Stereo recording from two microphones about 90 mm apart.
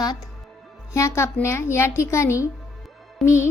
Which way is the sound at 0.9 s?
30° left (ahead or behind).